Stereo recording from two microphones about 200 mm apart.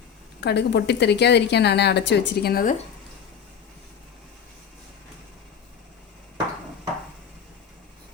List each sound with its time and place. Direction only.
0.4 s a woman's voice: 55° left (ahead or behind)